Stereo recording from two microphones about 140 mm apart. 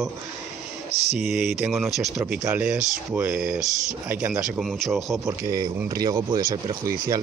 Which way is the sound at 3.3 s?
75° right (ahead or behind).